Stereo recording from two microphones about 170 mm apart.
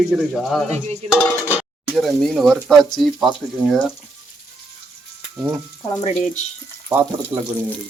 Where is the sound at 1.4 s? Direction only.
10° right (ahead or behind).